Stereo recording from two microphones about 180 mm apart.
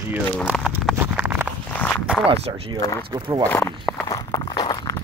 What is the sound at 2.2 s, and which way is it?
Speech, 30° right (ahead or behind).